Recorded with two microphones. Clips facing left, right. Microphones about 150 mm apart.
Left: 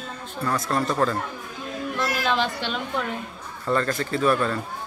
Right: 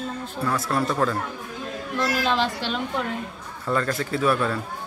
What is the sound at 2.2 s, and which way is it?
Speech, centre (ahead or behind).